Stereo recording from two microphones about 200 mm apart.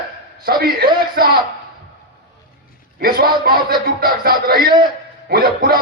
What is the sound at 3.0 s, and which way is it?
Music, 45° right (ahead or behind).